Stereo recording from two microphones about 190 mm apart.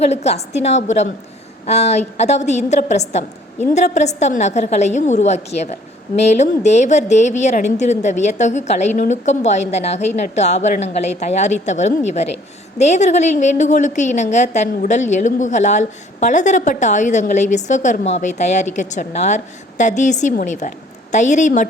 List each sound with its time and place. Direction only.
0.1 s a woman's voice: 35° left (ahead or behind)